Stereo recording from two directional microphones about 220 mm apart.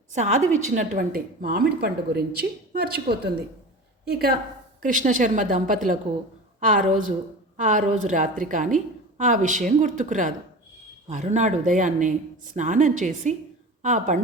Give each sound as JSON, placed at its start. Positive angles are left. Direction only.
{"t": 0.1, "sound": "a woman's voice", "side_deg": -30}